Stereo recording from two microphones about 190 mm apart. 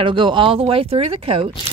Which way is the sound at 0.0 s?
25° right (ahead or behind).